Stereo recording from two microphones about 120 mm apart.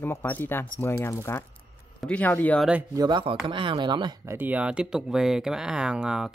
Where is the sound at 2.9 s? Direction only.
35° right (ahead or behind).